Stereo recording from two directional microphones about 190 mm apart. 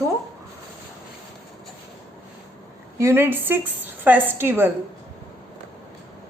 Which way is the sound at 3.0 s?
15° right (ahead or behind).